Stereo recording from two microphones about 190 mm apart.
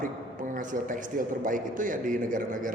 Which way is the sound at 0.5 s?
45° right (ahead or behind).